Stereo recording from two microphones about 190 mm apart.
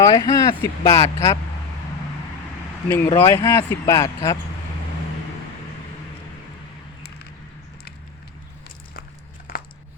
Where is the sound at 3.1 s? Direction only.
10° left (ahead or behind).